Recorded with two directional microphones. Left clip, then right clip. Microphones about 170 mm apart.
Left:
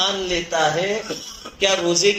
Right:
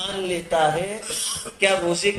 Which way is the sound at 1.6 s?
15° left (ahead or behind).